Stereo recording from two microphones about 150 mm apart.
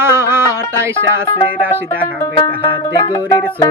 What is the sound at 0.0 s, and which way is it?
Music, 15° right (ahead or behind).